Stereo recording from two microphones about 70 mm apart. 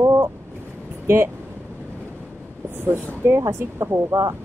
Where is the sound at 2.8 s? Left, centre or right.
Right.